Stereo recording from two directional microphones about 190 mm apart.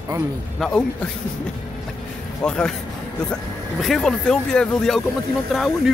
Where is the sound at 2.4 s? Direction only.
5° left (ahead or behind).